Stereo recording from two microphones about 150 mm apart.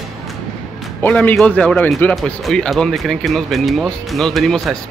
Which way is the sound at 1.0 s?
10° left (ahead or behind).